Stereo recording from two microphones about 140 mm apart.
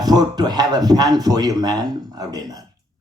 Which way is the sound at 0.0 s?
30° right (ahead or behind).